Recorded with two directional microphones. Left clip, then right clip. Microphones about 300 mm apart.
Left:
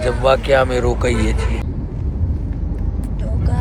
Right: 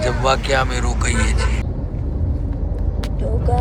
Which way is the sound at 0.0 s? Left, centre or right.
Centre.